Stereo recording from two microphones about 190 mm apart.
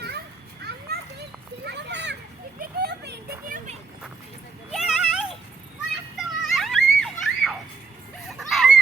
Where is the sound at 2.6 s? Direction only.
55° right (ahead or behind).